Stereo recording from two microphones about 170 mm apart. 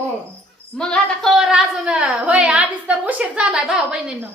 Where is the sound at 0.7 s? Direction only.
5° left (ahead or behind).